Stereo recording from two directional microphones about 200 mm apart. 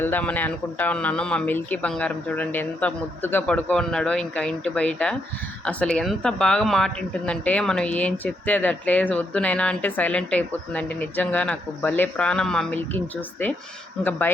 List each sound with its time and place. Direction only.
0.0 s speech: 10° left (ahead or behind)
14.0 s speech: 10° left (ahead or behind)